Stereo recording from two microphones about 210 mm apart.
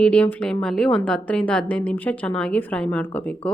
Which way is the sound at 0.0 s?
5° left (ahead or behind).